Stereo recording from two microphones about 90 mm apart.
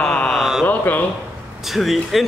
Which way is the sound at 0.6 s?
20° left (ahead or behind).